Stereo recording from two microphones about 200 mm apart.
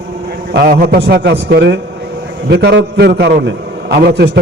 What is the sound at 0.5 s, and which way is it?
A man's voice, 45° right (ahead or behind).